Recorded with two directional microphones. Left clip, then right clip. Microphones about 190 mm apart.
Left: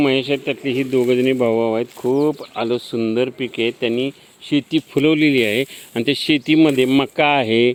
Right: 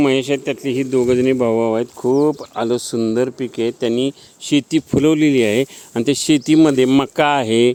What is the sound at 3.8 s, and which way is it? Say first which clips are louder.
Speech: right 2 dB; 35° right (ahead or behind).